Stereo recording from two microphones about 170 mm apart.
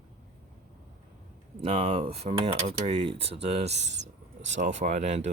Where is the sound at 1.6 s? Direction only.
35° right (ahead or behind).